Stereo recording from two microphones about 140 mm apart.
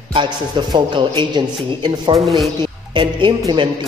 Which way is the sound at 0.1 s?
35° right (ahead or behind).